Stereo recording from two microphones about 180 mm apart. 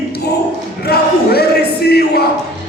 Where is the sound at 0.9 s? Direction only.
60° left (ahead or behind).